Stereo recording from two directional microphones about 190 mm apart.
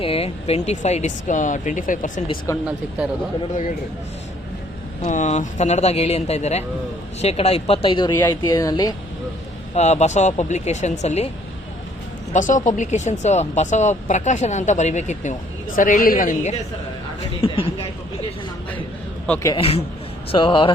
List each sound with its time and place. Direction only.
0.0 s speech: 30° left (ahead or behind)
2.5 s a man's voice: 15° left (ahead or behind)
5.0 s speech: 40° left (ahead or behind); by 8.9 s 20° left (ahead or behind)
9.7 s speech: 35° left (ahead or behind)
12.3 s speech: 40° left (ahead or behind)
17.4 s speech: 30° left (ahead or behind)
19.3 s a man's voice: 15° left (ahead or behind)
19.5 s speech: 30° left (ahead or behind)